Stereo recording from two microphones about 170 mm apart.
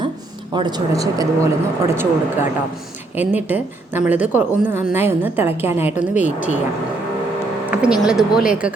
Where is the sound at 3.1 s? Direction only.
10° right (ahead or behind).